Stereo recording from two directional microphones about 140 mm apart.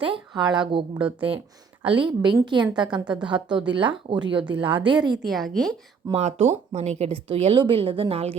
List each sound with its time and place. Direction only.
0.0 s a woman's voice: 35° right (ahead or behind)
1.9 s a woman's voice: 35° right (ahead or behind)
5.2 s a woman's voice: centre (ahead or behind)
6.1 s a woman's voice: 45° right (ahead or behind)